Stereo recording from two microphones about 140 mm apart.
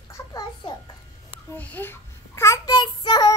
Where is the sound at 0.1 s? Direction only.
30° left (ahead or behind).